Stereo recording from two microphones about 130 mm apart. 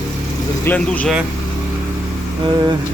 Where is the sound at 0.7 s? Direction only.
10° left (ahead or behind).